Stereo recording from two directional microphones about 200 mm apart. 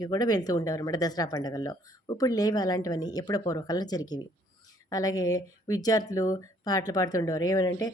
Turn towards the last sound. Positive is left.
turn(degrees=15)  # may be behind; listen again after turning